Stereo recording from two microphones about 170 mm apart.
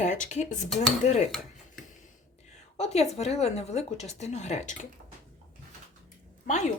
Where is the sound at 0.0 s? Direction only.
45° left (ahead or behind).